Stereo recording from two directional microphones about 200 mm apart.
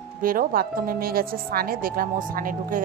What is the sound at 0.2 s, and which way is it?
Speech, 45° right (ahead or behind).